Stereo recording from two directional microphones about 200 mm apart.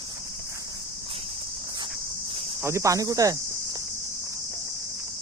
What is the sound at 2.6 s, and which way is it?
Cricket, 15° right (ahead or behind).